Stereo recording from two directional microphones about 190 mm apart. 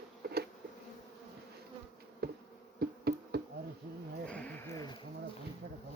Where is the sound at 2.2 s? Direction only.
55° right (ahead or behind).